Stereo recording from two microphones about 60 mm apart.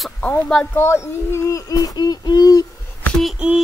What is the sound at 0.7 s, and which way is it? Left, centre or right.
Speech, left.